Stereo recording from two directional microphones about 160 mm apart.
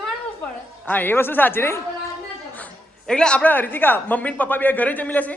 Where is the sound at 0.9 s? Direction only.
10° left (ahead or behind).